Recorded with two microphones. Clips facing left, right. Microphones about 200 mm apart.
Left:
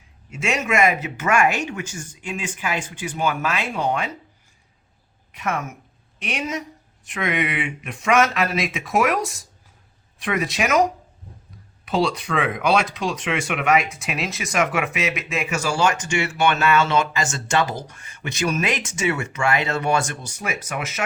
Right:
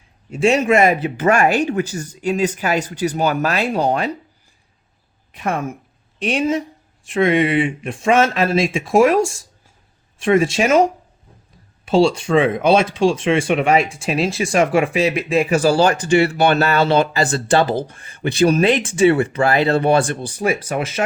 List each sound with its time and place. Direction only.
0.3 s speech: 30° right (ahead or behind)
5.3 s a woman's voice: 30° right (ahead or behind)